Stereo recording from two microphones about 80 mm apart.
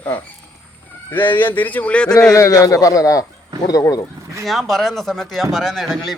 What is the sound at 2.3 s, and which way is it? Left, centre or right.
A man's voice, left.